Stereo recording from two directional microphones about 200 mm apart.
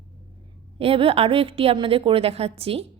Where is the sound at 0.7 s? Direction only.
30° right (ahead or behind).